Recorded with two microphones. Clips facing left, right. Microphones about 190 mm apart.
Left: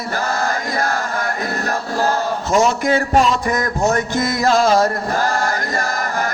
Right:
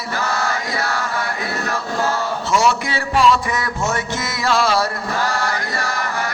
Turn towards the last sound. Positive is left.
turn(degrees=45)  # may be behind; listen again after turning